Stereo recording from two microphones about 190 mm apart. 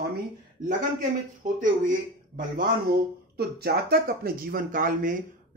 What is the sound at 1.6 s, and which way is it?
Speech, 45° right (ahead or behind).